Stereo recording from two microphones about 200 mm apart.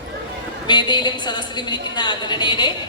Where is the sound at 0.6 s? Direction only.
20° left (ahead or behind).